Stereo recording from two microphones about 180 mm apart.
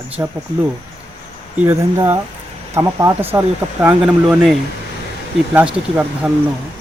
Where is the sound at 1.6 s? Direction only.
10° right (ahead or behind).